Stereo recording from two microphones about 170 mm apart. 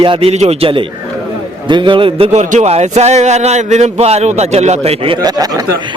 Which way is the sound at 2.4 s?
45° right (ahead or behind).